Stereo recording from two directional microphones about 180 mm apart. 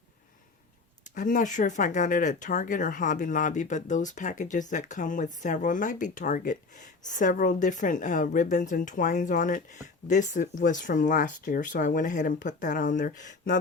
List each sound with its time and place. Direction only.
1.1 s speech: 45° left (ahead or behind)